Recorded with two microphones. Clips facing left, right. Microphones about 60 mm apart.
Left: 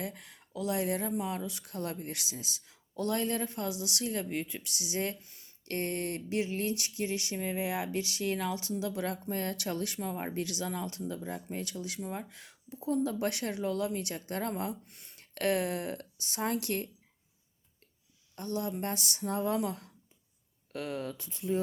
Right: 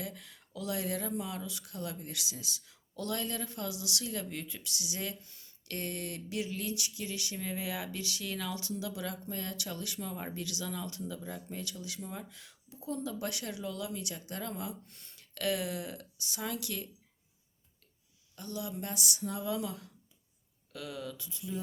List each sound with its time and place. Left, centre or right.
0.0 s speech: left
14.8 s a sound: left
15.2 s speech: left
18.3 s speech: left